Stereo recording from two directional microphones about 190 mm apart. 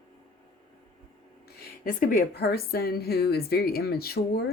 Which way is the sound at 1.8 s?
50° left (ahead or behind).